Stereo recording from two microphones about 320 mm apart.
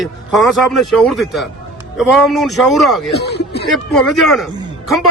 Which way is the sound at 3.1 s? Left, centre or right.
Left.